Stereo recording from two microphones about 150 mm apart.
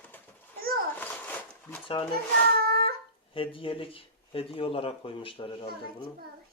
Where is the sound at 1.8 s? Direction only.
35° left (ahead or behind).